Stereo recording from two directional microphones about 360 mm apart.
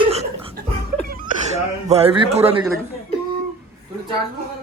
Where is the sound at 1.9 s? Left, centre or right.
Centre.